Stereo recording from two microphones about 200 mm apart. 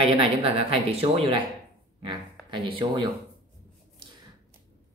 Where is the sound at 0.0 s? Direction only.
30° right (ahead or behind).